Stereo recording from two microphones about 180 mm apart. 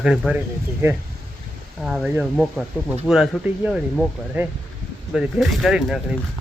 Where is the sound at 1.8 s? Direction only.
Centre (ahead or behind).